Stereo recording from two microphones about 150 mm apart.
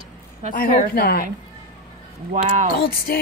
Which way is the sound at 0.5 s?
80° left.